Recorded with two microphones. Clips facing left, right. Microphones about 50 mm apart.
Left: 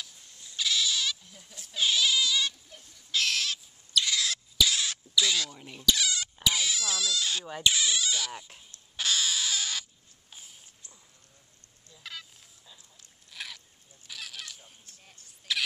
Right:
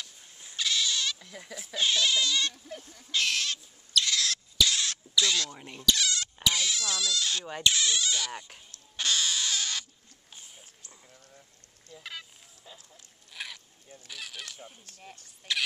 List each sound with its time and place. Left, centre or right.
0.6 s goat: centre
1.2 s goat: right
1.8 s speech: centre
3.1 s owl: centre
5.7 s speech: centre
8.9 s rodents: centre
10.3 s dog: centre
12.0 s fowl: centre
12.9 s a sound: centre
14.0 s speech: centre
14.9 s speech: right
15.5 s speech: centre